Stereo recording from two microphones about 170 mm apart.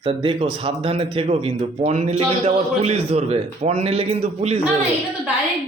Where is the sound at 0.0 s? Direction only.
30° right (ahead or behind).